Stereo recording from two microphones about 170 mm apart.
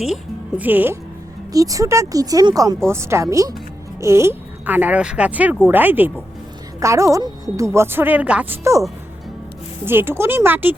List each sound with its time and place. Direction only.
0.0 s speech: 5° right (ahead or behind)
9.8 s speech: 15° right (ahead or behind)